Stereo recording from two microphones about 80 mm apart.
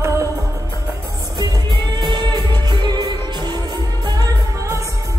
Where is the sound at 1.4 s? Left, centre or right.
Right.